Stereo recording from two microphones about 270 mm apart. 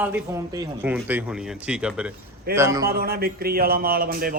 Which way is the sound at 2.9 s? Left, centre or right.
Right.